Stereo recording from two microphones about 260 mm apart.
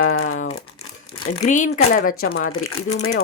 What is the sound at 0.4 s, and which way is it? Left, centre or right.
Crumpling, left.